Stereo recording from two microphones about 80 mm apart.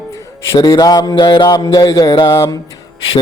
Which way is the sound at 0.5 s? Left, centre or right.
Left.